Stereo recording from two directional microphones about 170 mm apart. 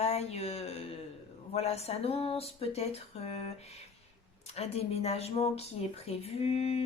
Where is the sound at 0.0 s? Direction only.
40° left (ahead or behind).